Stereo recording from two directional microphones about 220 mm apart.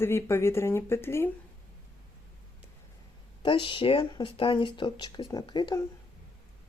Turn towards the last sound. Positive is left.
turn(degrees=20)  # may be behind; listen again after turning